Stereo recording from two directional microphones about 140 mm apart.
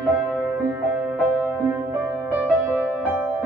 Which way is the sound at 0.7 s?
10° right (ahead or behind).